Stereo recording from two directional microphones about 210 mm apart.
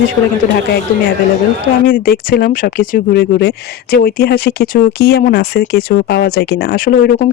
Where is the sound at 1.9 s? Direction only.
45° left (ahead or behind).